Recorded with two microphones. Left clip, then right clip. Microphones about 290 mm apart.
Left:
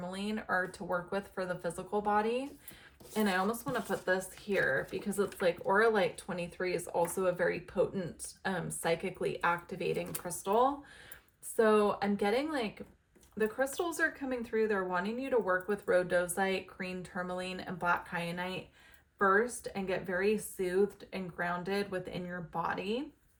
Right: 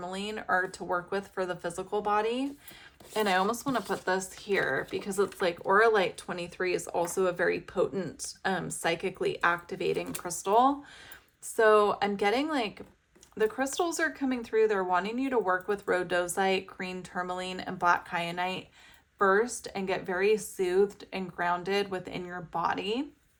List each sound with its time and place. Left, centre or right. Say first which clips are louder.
0.0 s a woman's voice: right 4 dB; right